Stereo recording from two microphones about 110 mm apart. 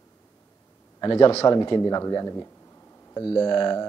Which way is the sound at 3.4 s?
45° left (ahead or behind).